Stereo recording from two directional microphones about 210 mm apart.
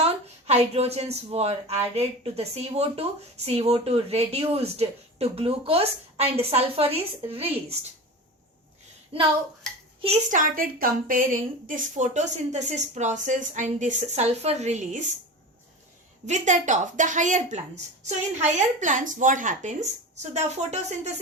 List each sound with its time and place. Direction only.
0.0 s speech: 30° right (ahead or behind)
10.0 s speech: 35° right (ahead or behind)
16.2 s speech: 35° right (ahead or behind)